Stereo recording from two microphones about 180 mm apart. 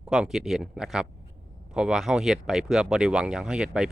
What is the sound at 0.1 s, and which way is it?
Speech, centre (ahead or behind).